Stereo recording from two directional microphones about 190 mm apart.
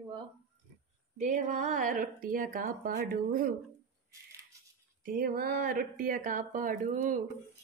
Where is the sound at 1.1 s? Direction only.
40° right (ahead or behind).